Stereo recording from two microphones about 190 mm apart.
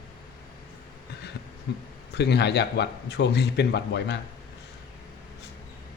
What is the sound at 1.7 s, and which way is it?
A man's voice, 60° left (ahead or behind).